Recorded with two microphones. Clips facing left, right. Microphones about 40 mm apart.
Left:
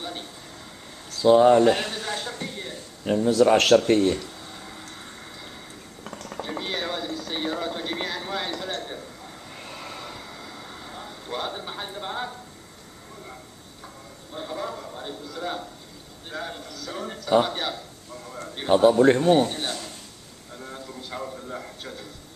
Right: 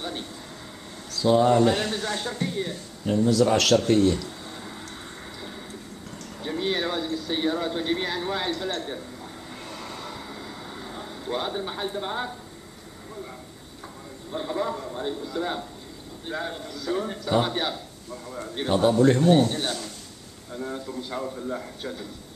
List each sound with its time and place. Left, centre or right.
1.1 s a man's voice: left; by 2.8 s centre
3.1 s speech: centre
3.4 s speech: left
6.0 s a sound: left
6.6 s a sound: centre
9.7 s train: centre
10.3 s vehicle: centre
14.3 s a man's voice: centre
18.4 s a sound: centre
18.7 s speech: centre
18.9 s speech: left
19.5 s a man's voice: centre